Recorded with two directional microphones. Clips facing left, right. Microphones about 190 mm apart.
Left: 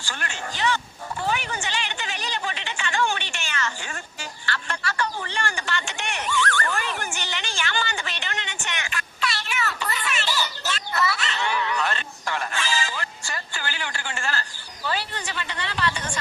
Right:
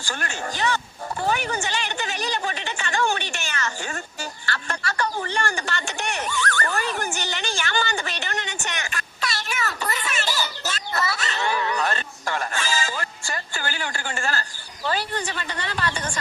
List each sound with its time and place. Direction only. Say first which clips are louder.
0.0 s speech: right 3 dB; 45° right (ahead or behind)
1.2 s a sound: right 3 dB; 45° right (ahead or behind)
14.8 s a woman's voice: right 3 dB; 45° right (ahead or behind)